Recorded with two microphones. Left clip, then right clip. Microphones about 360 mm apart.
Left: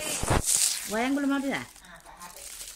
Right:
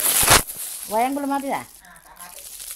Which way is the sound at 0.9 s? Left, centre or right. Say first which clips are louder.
Right 8 dB; centre.